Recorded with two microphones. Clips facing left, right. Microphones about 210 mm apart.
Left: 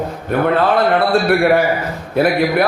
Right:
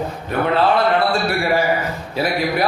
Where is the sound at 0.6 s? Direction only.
55° left (ahead or behind).